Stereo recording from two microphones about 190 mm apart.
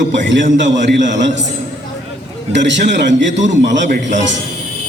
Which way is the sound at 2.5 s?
70° right (ahead or behind).